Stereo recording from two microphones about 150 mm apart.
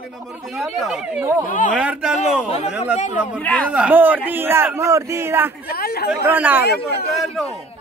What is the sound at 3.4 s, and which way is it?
Speech, 10° left (ahead or behind).